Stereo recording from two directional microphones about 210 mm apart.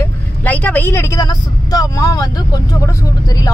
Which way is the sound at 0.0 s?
10° left (ahead or behind).